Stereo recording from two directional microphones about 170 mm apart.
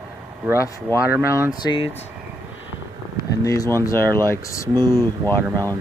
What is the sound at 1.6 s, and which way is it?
Speech, 30° left (ahead or behind).